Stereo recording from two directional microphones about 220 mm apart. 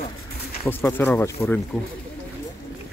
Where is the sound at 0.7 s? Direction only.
10° left (ahead or behind).